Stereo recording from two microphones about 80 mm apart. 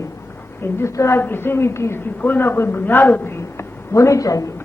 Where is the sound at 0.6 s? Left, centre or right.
Left.